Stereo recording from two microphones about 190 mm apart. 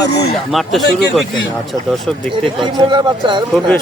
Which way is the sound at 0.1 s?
60° left (ahead or behind).